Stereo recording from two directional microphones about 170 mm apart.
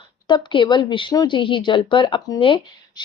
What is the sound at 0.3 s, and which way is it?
A woman's voice, 25° left (ahead or behind).